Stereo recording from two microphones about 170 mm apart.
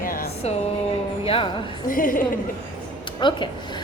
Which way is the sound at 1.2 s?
30° left (ahead or behind).